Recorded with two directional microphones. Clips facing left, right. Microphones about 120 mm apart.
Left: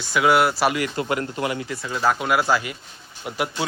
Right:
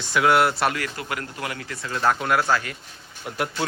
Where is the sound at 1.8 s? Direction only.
5° left (ahead or behind).